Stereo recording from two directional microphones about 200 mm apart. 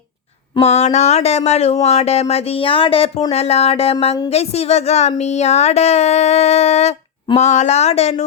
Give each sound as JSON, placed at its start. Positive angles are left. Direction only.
{"t": 0.5, "sound": "speech", "side_deg": 35}